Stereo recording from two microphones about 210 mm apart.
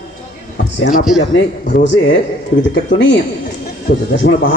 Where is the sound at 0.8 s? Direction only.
40° left (ahead or behind).